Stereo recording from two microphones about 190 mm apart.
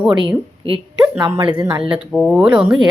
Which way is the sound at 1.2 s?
25° right (ahead or behind).